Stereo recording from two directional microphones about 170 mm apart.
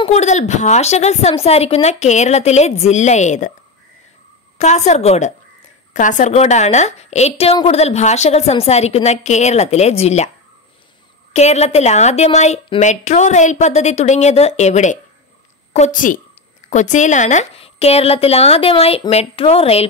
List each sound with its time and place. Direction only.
0.0 s a woman's voice: 40° left (ahead or behind)
4.6 s a woman's voice: 40° left (ahead or behind)
11.3 s a woman's voice: 40° left (ahead or behind)